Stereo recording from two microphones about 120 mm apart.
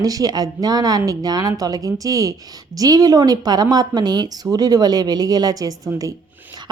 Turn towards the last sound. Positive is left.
turn(degrees=-30)  # may be behind; listen again after turning